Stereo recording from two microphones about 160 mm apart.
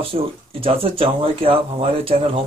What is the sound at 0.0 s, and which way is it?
Speech, 35° right (ahead or behind).